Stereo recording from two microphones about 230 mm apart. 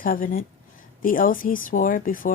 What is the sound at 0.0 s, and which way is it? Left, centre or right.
A woman's voice, left.